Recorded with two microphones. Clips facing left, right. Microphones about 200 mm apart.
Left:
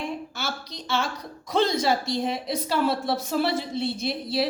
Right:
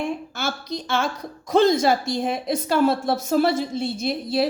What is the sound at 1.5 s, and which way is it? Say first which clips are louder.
A woman's voice: right 5 dB; 50° right (ahead or behind).